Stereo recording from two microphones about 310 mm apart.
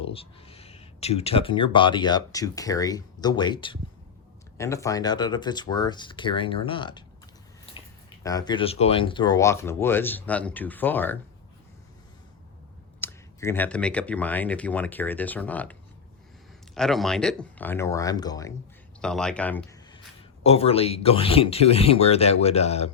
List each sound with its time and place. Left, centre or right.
0.0 s speech: centre
8.2 s speech: centre
13.0 s speech: centre
16.7 s a man's voice: centre
20.4 s speech: centre